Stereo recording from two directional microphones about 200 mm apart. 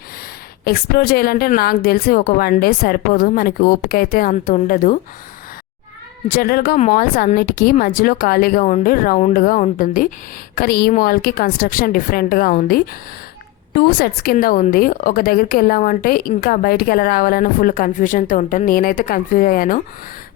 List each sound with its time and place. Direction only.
0.6 s speech: 50° left (ahead or behind)
6.3 s speech: 45° left (ahead or behind)